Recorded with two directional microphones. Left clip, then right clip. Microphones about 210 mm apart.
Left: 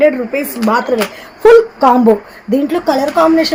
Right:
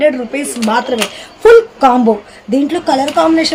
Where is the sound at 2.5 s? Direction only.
35° left (ahead or behind).